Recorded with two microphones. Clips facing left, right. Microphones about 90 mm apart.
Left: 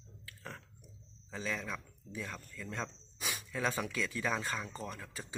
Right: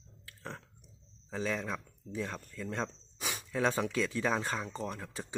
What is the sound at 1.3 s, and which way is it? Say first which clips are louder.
Speech: right 4 dB; 30° right (ahead or behind).